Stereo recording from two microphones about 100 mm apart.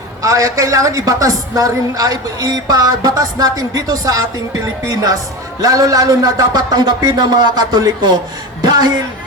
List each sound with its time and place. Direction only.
0.2 s a woman's voice: 35° right (ahead or behind)